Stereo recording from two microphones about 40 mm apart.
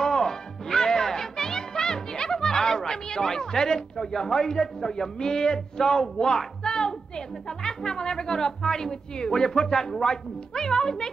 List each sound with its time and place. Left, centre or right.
0.0 s music: centre
3.9 s a man's voice: centre